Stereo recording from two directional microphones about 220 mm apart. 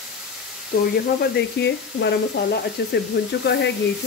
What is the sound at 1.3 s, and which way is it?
Speech, 50° left (ahead or behind).